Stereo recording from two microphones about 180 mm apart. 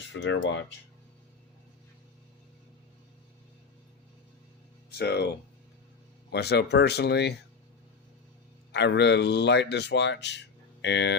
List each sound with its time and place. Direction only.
0.1 s speech: 85° left
4.9 s speech: 65° left (ahead or behind)
8.7 s speech: 75° left (ahead or behind)